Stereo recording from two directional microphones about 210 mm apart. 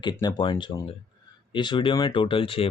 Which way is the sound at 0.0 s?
20° left (ahead or behind).